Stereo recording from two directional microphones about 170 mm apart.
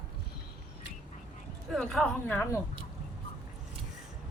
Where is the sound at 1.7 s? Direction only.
5° left (ahead or behind).